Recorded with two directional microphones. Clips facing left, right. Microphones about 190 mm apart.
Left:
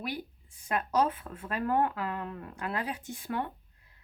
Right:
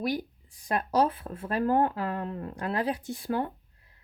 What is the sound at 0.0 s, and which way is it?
Speech, 35° right (ahead or behind).